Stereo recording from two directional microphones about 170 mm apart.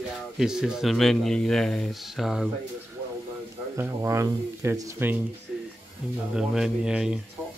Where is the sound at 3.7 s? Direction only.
15° right (ahead or behind).